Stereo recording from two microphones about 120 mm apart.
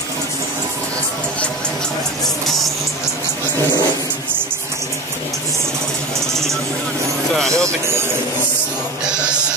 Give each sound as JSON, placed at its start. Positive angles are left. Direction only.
{"t": 7.3, "sound": "music", "side_deg": 5}
{"t": 7.6, "sound": "speech", "side_deg": -20}
{"t": 9.0, "sound": "music", "side_deg": -10}